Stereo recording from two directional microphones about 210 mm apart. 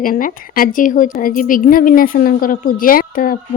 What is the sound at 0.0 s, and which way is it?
Speech, 40° left (ahead or behind).